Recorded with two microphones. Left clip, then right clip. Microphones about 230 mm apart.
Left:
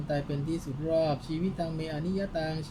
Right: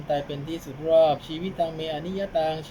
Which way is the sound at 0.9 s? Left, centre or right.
Left.